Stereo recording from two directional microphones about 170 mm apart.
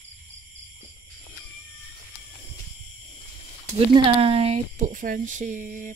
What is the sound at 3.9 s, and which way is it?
Speech, 35° right (ahead or behind).